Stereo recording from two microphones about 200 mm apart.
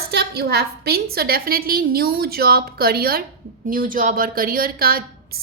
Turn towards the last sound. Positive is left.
turn(degrees=-50)  # may be behind; listen again after turning